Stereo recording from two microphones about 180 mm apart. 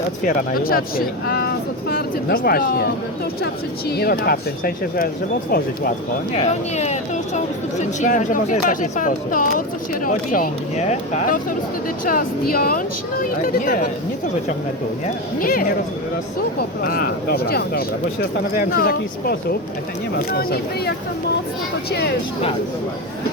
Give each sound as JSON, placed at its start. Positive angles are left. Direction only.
{"t": 0.3, "sound": "speech", "side_deg": 55}
{"t": 6.3, "sound": "a woman's voice", "side_deg": 35}
{"t": 12.0, "sound": "speech", "side_deg": 55}
{"t": 15.4, "sound": "speech", "side_deg": 50}